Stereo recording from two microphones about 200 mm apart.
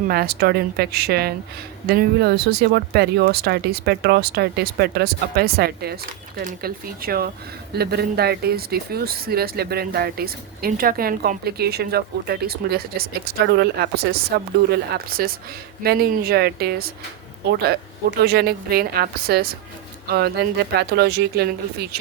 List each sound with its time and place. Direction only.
0.1 s speech: 50° right (ahead or behind)